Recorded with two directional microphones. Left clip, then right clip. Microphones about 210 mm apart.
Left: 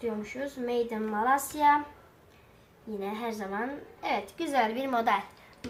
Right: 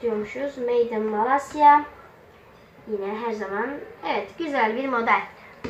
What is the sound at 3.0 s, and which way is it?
A woman's voice, 50° left (ahead or behind).